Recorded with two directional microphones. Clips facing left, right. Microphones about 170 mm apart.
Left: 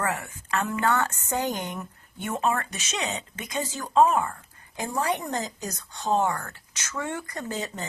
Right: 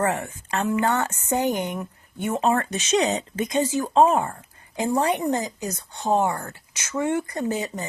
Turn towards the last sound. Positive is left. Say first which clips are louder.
# right 6 dB
turn(degrees=-15)  # may be behind; listen again after turning